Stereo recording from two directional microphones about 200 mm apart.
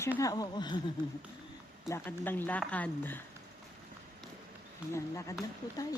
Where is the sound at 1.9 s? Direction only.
10° left (ahead or behind).